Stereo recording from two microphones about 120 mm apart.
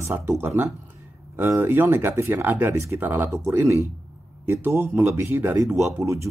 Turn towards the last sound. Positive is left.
turn(degrees=-25)  # may be behind; listen again after turning